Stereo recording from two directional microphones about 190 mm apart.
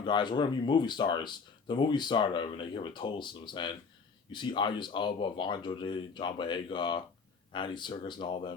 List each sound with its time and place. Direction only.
0.0 s speech: 25° left (ahead or behind)